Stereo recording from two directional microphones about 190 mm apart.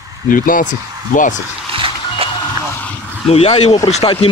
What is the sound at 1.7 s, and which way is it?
Music, 30° right (ahead or behind).